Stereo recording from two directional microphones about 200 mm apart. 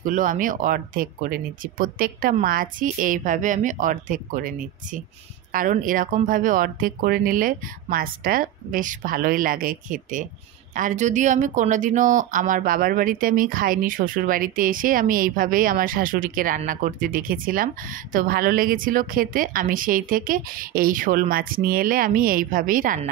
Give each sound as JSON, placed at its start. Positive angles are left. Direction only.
{"t": 0.0, "sound": "speech", "side_deg": -40}